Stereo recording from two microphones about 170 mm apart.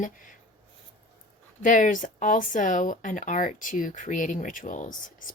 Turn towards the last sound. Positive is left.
turn(degrees=50)  # may be behind; listen again after turning